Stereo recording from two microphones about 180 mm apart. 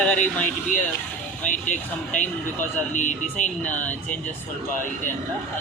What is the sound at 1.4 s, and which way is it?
Speech, 45° left (ahead or behind).